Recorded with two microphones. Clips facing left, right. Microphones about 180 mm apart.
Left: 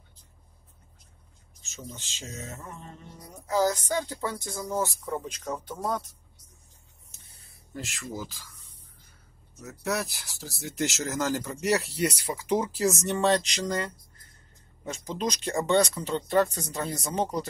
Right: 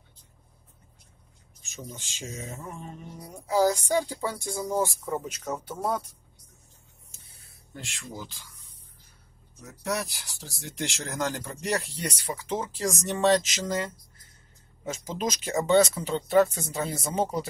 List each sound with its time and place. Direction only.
1.6 s speech: 15° right (ahead or behind)
3.4 s speech: 10° right (ahead or behind)
7.7 s speech: centre (ahead or behind)
9.8 s speech: centre (ahead or behind)
14.9 s speech: 5° right (ahead or behind)